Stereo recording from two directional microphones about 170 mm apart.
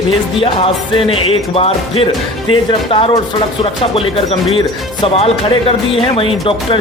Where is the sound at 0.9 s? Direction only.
30° left (ahead or behind).